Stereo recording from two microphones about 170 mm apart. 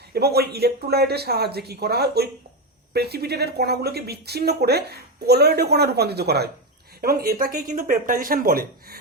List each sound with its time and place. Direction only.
0.1 s speech: 70° right (ahead or behind)
7.0 s speech: 60° right (ahead or behind)